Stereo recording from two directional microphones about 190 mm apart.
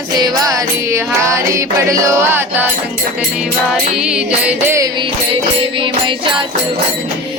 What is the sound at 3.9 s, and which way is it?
Music, 5° right (ahead or behind).